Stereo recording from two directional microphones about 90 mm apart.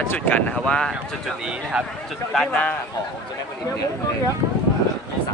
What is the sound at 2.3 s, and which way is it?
Speech, 5° left (ahead or behind).